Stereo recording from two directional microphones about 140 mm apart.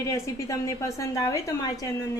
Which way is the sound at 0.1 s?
25° left (ahead or behind).